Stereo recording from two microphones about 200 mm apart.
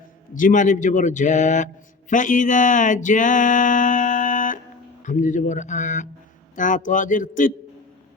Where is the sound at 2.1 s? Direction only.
40° left (ahead or behind).